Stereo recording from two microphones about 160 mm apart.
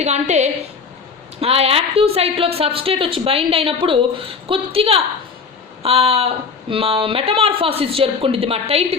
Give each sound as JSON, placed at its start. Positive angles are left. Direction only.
{"t": 0.0, "sound": "a woman's voice", "side_deg": -45}